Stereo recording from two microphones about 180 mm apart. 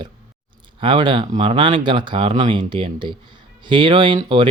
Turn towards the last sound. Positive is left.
turn(degrees=-25)  # may be behind; listen again after turning